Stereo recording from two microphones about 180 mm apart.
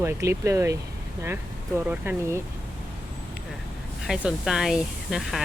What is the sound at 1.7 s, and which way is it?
Speech, 10° right (ahead or behind).